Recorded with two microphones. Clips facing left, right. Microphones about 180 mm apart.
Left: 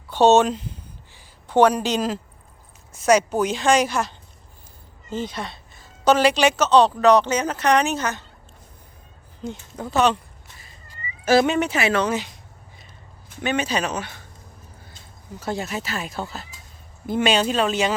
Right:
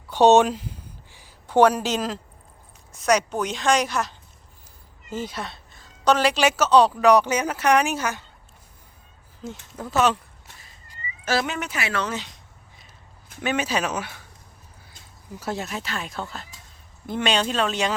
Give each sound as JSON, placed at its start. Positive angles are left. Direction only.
{"t": 0.1, "sound": "a sound", "side_deg": -15}
{"t": 2.9, "sound": "a woman's voice", "side_deg": 5}
{"t": 5.1, "sound": "a woman's voice", "side_deg": -5}
{"t": 9.4, "sound": "a woman's voice", "side_deg": -5}
{"t": 11.3, "sound": "speech", "side_deg": 25}
{"t": 13.4, "sound": "a woman's voice", "side_deg": -5}
{"t": 15.4, "sound": "a woman's voice", "side_deg": -5}